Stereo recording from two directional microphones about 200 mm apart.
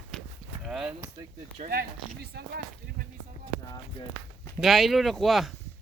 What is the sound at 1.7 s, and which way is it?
Speech, 50° right (ahead or behind).